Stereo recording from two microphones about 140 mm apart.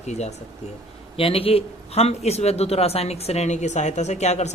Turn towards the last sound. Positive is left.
turn(degrees=55)  # may be behind; listen again after turning